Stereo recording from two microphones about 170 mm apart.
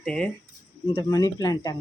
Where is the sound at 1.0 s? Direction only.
20° left (ahead or behind).